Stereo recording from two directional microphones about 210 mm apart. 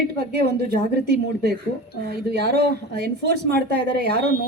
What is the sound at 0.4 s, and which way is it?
A woman's voice, 50° right (ahead or behind).